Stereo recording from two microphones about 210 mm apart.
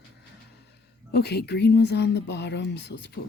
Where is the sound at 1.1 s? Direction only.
50° left (ahead or behind).